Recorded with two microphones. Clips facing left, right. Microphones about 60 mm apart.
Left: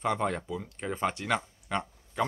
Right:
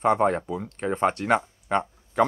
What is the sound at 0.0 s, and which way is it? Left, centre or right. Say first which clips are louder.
Speech: right 8 dB; right.